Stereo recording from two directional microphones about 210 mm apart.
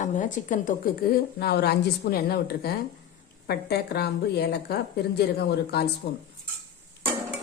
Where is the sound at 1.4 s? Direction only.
50° left (ahead or behind).